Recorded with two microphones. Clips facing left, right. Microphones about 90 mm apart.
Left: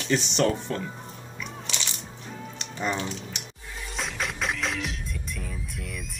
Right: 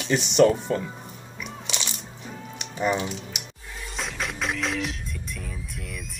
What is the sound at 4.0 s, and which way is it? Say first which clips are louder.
Music: even; centre (ahead or behind).